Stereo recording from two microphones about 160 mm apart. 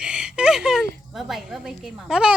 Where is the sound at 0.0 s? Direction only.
5° right (ahead or behind).